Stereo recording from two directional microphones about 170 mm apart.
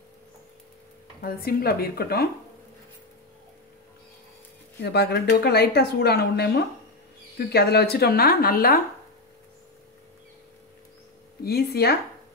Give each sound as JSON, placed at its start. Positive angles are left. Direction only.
{"t": 1.2, "sound": "speech", "side_deg": 60}
{"t": 4.7, "sound": "speech", "side_deg": 75}
{"t": 11.4, "sound": "speech", "side_deg": 65}